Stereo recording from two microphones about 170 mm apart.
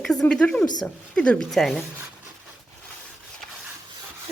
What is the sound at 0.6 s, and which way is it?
Speech, 25° left (ahead or behind).